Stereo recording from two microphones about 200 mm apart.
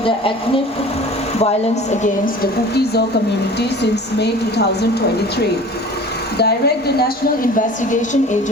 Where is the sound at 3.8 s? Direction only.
55° left (ahead or behind).